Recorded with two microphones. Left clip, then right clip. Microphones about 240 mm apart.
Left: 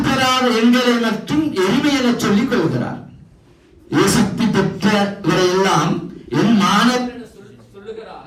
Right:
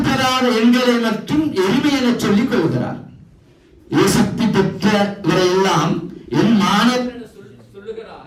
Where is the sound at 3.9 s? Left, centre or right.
Right.